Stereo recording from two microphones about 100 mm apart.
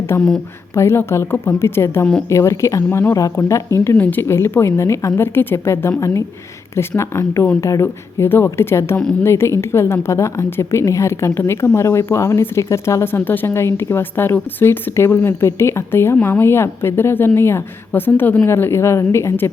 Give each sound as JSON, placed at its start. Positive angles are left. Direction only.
{"t": 0.1, "sound": "a woman's voice", "side_deg": 25}
{"t": 3.9, "sound": "a woman's voice", "side_deg": 15}